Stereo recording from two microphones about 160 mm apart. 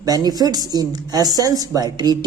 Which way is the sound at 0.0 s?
25° right (ahead or behind).